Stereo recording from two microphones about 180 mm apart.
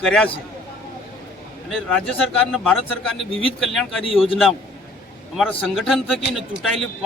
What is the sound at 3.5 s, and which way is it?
Speech, centre (ahead or behind).